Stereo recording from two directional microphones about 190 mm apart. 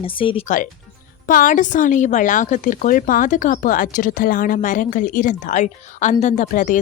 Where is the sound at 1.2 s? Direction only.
45° left (ahead or behind).